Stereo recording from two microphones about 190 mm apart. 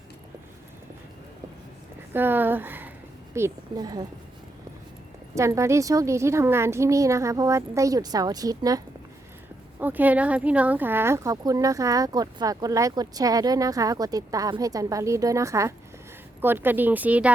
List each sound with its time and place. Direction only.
2.1 s a woman's voice: 10° right (ahead or behind)
5.3 s speech: 15° right (ahead or behind)
9.8 s speech: 10° right (ahead or behind)